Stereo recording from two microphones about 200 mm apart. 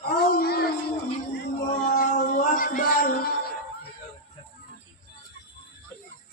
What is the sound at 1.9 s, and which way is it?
Music, 40° left (ahead or behind).